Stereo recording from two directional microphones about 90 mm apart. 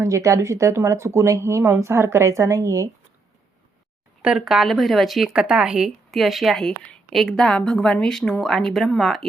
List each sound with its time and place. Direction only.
0.0 s speech: 35° right (ahead or behind)
4.2 s speech: 5° right (ahead or behind)